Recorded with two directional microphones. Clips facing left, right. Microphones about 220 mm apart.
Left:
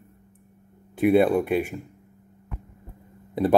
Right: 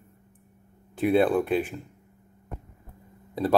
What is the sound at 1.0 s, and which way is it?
Speech, 10° left (ahead or behind).